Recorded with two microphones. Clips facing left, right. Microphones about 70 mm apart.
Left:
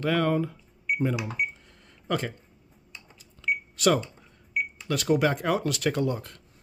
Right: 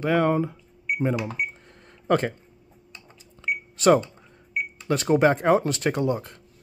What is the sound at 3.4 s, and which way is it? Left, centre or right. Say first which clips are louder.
Cash register: right 5 dB; right.